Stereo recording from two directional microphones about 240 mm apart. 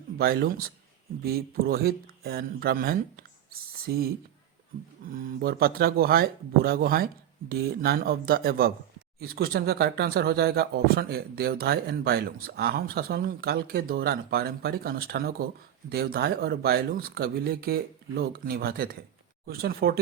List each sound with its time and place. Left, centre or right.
0.2 s speech: right
5.1 s speech: right